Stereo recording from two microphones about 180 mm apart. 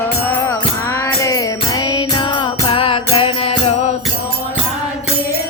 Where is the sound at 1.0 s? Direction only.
20° left (ahead or behind).